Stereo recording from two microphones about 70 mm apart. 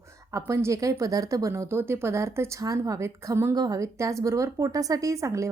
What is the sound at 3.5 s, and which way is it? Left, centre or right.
A woman's voice, right.